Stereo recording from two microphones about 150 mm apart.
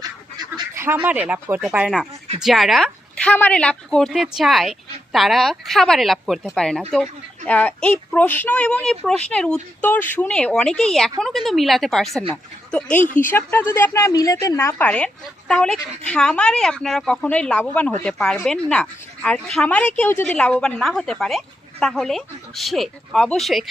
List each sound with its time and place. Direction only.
0.0 s goose: 25° right (ahead or behind)
1.6 s a woman's voice: 5° right (ahead or behind)